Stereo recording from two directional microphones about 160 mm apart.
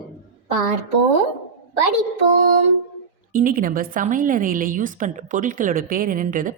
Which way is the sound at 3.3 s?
60° right (ahead or behind).